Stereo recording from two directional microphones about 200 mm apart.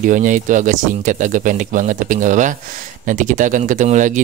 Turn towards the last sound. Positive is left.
turn(degrees=-40)  # may be behind; listen again after turning